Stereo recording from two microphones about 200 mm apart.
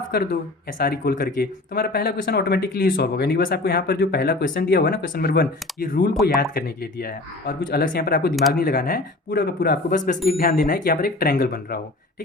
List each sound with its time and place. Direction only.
0.1 s speech: 50° left (ahead or behind)